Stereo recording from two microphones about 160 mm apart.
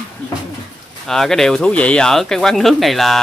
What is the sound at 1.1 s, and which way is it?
Speech, centre (ahead or behind).